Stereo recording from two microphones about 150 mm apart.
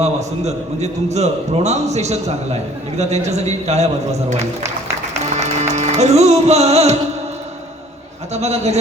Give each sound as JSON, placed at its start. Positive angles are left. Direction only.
{"t": 0.0, "sound": "a man's voice", "side_deg": -50}
{"t": 5.3, "sound": "music", "side_deg": -50}
{"t": 8.3, "sound": "a man's voice", "side_deg": -45}